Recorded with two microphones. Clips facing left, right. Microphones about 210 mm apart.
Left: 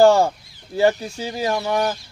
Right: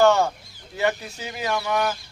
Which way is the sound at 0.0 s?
35° left (ahead or behind).